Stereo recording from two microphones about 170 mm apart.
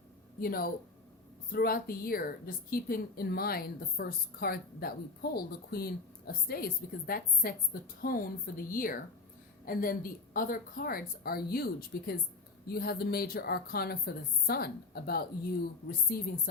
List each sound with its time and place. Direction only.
0.3 s a woman's voice: 60° left (ahead or behind)